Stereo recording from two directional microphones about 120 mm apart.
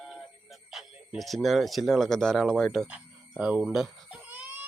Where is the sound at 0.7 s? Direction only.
Centre (ahead or behind).